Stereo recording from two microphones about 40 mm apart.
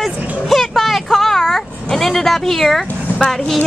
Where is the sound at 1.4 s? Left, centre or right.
Centre.